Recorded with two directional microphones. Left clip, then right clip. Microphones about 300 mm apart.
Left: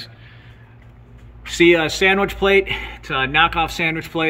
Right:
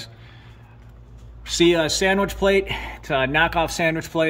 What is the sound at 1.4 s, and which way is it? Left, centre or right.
Speech, centre.